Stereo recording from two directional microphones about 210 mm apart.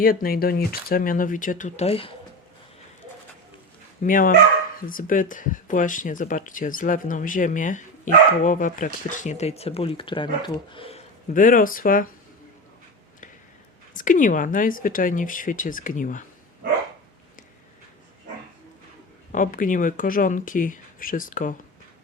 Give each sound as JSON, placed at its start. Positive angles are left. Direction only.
{"t": 0.0, "sound": "speech", "side_deg": 45}
{"t": 4.0, "sound": "speech", "side_deg": 40}
{"t": 11.3, "sound": "speech", "side_deg": 40}
{"t": 13.9, "sound": "speech", "side_deg": 40}
{"t": 19.3, "sound": "speech", "side_deg": 40}